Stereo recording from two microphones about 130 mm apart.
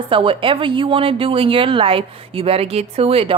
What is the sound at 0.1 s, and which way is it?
A woman's voice, 40° right (ahead or behind).